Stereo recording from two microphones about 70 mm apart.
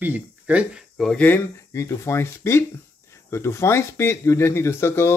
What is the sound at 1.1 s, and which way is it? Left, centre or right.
Speech, left.